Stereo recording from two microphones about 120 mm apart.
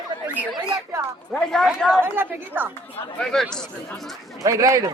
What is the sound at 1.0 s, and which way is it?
Speech, 25° right (ahead or behind).